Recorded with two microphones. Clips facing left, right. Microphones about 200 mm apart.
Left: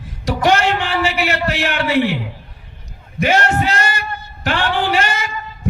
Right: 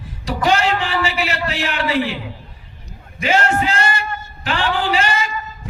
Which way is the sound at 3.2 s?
40° left (ahead or behind).